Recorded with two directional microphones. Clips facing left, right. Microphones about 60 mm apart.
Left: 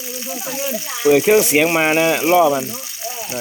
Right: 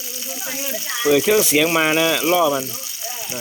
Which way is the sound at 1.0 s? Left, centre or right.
Left.